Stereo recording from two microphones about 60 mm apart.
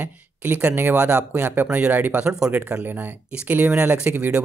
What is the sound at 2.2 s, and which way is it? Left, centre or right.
Speech, centre.